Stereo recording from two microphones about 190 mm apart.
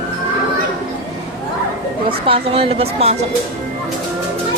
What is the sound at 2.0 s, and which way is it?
Speech, 30° right (ahead or behind).